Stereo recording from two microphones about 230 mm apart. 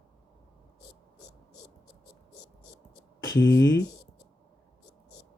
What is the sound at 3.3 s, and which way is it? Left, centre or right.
Speech, left.